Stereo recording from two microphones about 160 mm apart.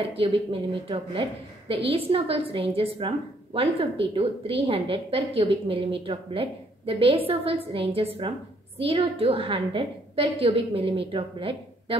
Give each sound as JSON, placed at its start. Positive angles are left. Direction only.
{"t": 0.2, "sound": "a woman's voice", "side_deg": -35}